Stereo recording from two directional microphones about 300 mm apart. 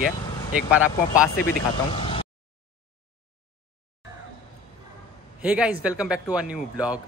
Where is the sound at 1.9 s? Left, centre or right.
Centre.